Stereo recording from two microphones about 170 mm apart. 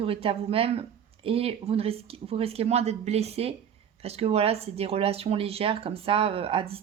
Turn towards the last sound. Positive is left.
turn(degrees=-35)  # may be behind; listen again after turning